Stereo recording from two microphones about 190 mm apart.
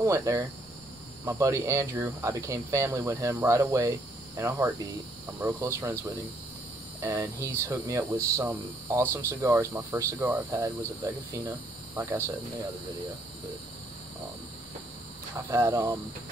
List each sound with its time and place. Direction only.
0.0 s speech: 15° right (ahead or behind)
15.3 s speech: 15° right (ahead or behind)